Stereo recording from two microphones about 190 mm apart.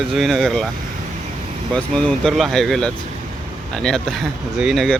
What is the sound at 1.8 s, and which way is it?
Speech, 5° left (ahead or behind).